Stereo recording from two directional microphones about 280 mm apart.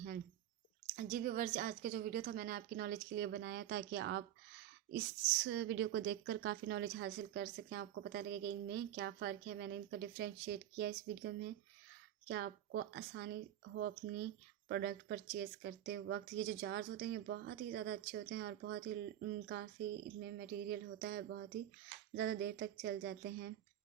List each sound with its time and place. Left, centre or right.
0.9 s a woman's voice: right
20.2 s a woman's voice: right